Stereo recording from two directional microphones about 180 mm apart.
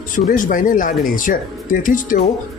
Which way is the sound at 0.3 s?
50° left (ahead or behind).